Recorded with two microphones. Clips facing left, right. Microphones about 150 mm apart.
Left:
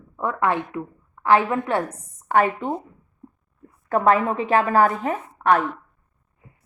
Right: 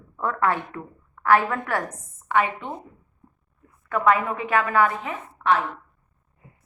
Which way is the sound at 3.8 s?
35° left (ahead or behind).